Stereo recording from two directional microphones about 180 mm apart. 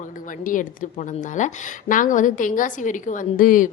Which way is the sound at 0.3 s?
50° left (ahead or behind).